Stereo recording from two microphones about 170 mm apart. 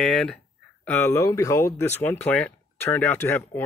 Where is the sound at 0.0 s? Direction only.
5° left (ahead or behind).